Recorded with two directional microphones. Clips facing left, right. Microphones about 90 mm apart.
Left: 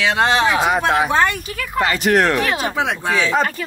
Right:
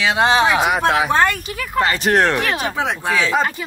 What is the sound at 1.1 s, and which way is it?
Speech, 40° right (ahead or behind).